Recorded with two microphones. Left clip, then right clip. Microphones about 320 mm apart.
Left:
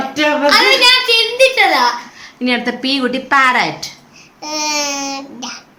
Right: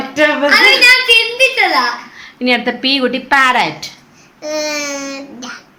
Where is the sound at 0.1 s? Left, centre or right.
Centre.